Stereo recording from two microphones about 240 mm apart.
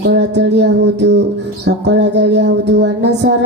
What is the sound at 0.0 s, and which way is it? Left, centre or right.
Music, right.